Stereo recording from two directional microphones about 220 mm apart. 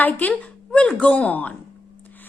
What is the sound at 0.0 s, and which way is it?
A woman's voice, 5° left (ahead or behind).